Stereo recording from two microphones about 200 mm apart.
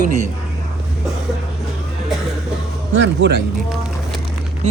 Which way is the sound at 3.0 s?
60° right (ahead or behind).